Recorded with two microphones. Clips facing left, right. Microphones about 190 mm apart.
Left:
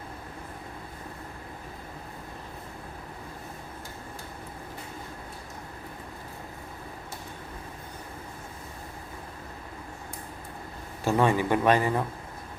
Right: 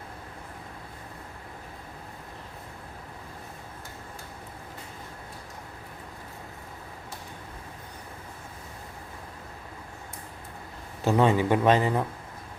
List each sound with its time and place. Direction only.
11.0 s a man's voice: 20° right (ahead or behind)